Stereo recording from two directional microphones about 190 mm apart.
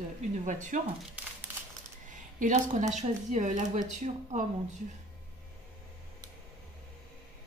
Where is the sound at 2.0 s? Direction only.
40° right (ahead or behind).